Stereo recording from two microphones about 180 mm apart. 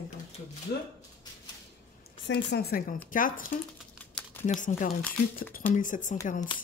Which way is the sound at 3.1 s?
50° left (ahead or behind).